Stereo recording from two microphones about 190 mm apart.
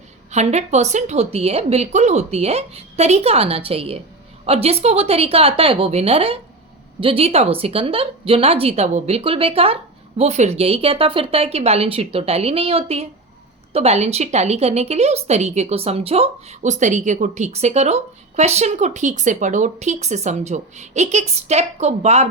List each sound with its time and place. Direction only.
0.3 s a woman's voice: 35° right (ahead or behind)